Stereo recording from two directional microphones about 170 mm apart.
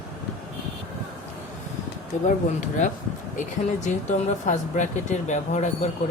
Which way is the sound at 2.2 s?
50° left (ahead or behind).